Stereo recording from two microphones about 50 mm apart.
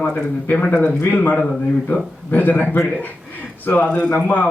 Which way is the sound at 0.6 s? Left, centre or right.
Left.